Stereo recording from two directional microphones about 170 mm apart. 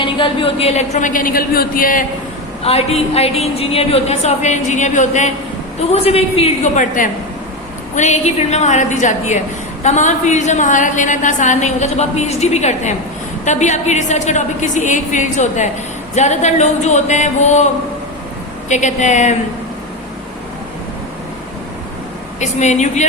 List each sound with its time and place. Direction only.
0.0 s a woman's voice: 30° left (ahead or behind); by 2.0 s 55° left (ahead or behind)
2.6 s a woman's voice: 35° left (ahead or behind)
18.7 s a woman's voice: 45° left (ahead or behind)
22.4 s a woman's voice: 45° left (ahead or behind)